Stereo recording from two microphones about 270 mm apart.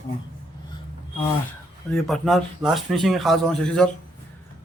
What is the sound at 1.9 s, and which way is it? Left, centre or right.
A man's voice, centre.